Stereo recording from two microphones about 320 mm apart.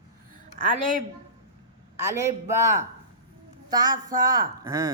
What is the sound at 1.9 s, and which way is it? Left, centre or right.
Speech, centre.